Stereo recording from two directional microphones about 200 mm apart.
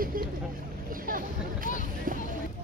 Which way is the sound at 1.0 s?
45° right (ahead or behind).